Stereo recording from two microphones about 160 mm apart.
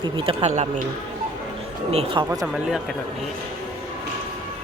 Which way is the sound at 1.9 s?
40° right (ahead or behind).